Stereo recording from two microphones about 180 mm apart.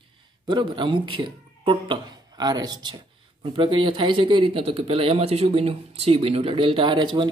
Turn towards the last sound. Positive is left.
turn(degrees=-25)  # may be behind; listen again after turning